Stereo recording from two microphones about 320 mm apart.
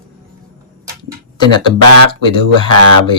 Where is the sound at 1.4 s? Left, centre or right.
Centre.